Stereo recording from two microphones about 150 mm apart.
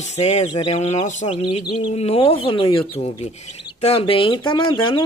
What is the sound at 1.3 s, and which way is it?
Speech, 35° left (ahead or behind).